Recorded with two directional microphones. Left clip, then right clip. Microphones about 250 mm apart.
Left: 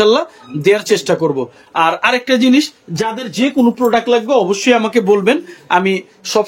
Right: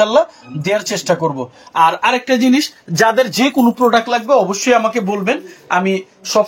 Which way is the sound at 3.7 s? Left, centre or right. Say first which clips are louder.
Left 1 dB; left.